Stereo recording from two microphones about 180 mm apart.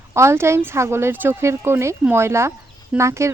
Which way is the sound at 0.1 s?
15° right (ahead or behind).